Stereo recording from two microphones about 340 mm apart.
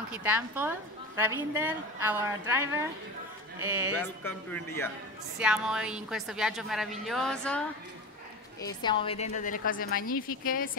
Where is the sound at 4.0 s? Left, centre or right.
Centre.